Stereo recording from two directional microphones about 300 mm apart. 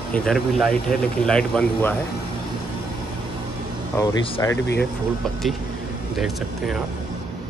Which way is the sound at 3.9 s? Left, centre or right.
Centre.